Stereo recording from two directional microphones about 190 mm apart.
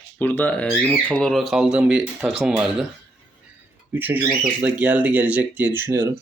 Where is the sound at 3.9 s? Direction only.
10° right (ahead or behind).